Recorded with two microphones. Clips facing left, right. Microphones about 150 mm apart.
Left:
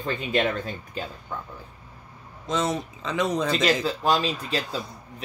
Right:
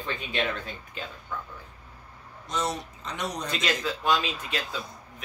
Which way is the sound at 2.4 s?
90° left.